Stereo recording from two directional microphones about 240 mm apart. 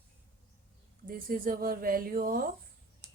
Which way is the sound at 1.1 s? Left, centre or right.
Right.